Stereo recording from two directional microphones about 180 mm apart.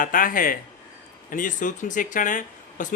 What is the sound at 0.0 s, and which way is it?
Speech, 50° left (ahead or behind).